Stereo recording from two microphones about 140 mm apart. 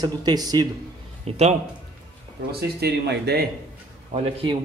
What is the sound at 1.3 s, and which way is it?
Speech, 50° right (ahead or behind).